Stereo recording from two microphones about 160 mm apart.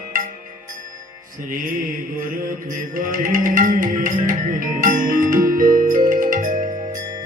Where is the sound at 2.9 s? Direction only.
55° right (ahead or behind).